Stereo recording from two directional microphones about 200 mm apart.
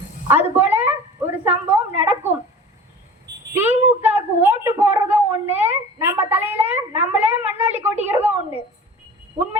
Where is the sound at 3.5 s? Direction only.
10° right (ahead or behind).